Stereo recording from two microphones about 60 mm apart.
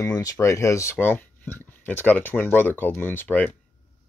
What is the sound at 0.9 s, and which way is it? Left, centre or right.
Speech, left.